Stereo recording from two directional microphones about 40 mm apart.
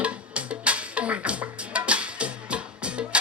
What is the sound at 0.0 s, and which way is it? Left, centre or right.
Music, right.